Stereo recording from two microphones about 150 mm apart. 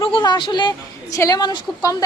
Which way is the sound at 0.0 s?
30° left (ahead or behind).